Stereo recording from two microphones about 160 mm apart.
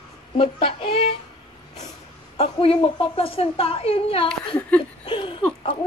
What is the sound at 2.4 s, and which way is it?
A woman's voice, 35° left (ahead or behind).